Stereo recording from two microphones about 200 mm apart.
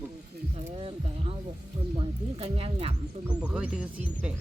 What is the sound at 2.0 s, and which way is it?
Speech, 30° right (ahead or behind).